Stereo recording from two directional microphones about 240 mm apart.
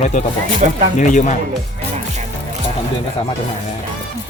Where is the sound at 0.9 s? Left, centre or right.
Left.